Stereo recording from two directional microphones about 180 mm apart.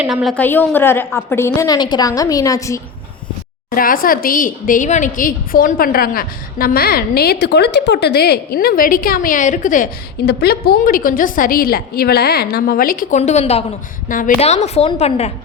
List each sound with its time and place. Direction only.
0.0 s a woman's voice: centre (ahead or behind); by 2.8 s 15° left (ahead or behind)
3.8 s a woman's voice: 50° left (ahead or behind)
10.2 s a woman's voice: 60° left (ahead or behind); by 13.7 s 35° left (ahead or behind)
14.1 s a woman's voice: 50° left (ahead or behind)
14.4 s a woman's voice: 35° left (ahead or behind)